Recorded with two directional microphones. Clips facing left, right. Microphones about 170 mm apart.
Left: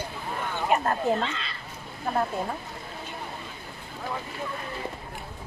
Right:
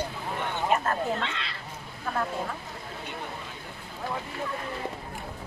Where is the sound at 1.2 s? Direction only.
70° right (ahead or behind).